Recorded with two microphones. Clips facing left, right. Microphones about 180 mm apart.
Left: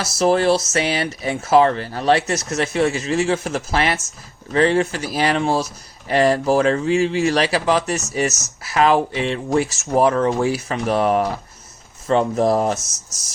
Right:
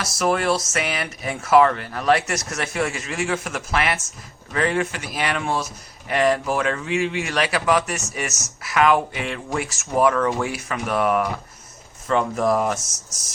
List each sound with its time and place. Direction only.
0.0 s speech: 30° left (ahead or behind)